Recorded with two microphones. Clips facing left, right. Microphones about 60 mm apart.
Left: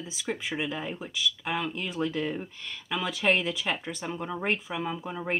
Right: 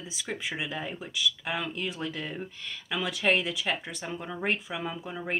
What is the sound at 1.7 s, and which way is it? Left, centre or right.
Speech, left.